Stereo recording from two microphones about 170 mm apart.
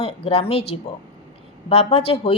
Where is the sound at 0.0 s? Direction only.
35° left (ahead or behind).